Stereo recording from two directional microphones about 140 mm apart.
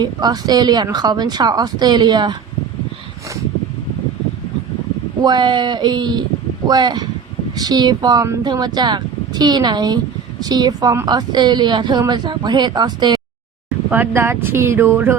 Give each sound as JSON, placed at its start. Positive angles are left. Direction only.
{"t": 0.0, "sound": "speech", "side_deg": -30}
{"t": 5.2, "sound": "a woman's voice", "side_deg": -30}
{"t": 13.9, "sound": "speech", "side_deg": -15}